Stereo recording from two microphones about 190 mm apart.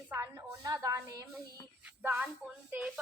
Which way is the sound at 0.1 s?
15° right (ahead or behind).